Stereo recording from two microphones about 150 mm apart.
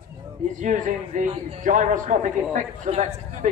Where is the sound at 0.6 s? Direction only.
55° right (ahead or behind).